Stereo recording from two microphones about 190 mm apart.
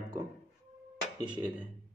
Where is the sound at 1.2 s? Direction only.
5° right (ahead or behind).